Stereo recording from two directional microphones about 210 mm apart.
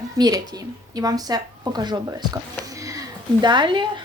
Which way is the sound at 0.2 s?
20° right (ahead or behind).